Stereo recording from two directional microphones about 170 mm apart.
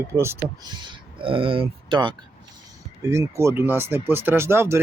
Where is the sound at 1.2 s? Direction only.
30° right (ahead or behind).